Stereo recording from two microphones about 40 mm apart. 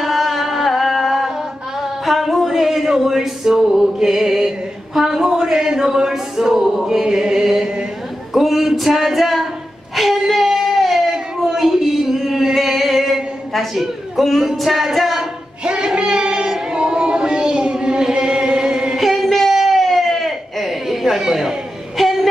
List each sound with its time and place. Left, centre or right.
0.0 s carnatic music: centre
1.8 s speech: centre
8.3 s speech: centre
9.9 s a sound: centre
12.5 s music: centre
13.5 s a man's voice: centre
15.6 s child singing: right
18.9 s a sound: centre